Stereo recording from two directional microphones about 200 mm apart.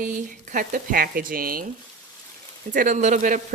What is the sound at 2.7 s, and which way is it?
Speech, 40° right (ahead or behind).